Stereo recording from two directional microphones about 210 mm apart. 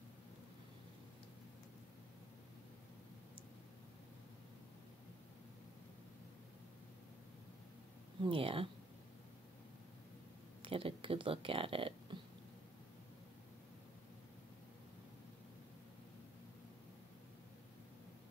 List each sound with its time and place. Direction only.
8.2 s speech: 25° right (ahead or behind)
10.6 s speech: 25° right (ahead or behind)